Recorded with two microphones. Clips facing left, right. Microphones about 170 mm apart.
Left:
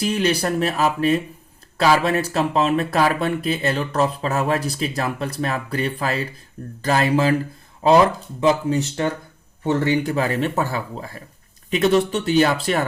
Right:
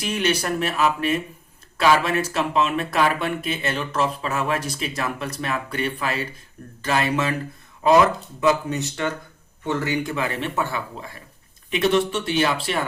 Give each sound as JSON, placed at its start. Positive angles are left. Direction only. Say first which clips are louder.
{"t": 0.0, "sound": "speech", "louder": "left 3 dB", "side_deg": 35}